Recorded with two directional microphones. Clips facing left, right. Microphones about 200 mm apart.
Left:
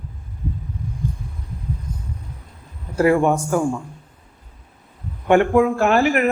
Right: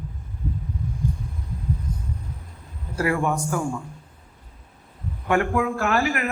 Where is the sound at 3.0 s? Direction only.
25° left (ahead or behind).